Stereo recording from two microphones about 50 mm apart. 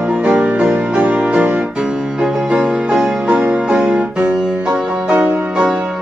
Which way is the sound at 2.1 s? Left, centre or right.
Centre.